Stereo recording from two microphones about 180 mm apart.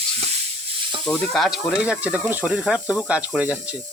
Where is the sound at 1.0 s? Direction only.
5° left (ahead or behind).